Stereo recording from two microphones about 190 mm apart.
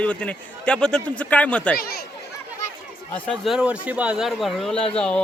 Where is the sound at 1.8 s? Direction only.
55° left (ahead or behind).